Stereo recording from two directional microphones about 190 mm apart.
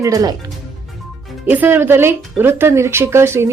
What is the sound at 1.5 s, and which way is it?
Speech, 10° right (ahead or behind).